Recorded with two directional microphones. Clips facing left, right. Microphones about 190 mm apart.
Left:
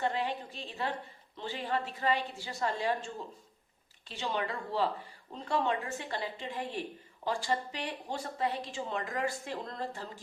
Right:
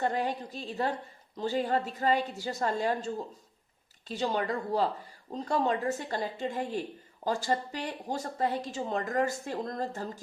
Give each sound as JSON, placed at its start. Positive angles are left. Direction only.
{"t": 0.0, "sound": "a woman's voice", "side_deg": -45}
{"t": 4.1, "sound": "a woman's voice", "side_deg": -40}